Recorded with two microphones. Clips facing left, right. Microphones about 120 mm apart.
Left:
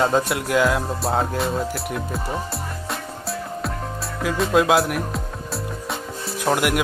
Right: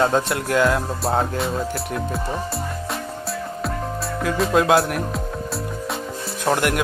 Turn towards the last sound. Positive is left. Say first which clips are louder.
# even
turn(degrees=5)  # may be behind; listen again after turning